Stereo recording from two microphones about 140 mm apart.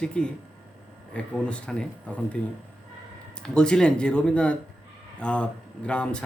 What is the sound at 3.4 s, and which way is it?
Speech, 5° left (ahead or behind).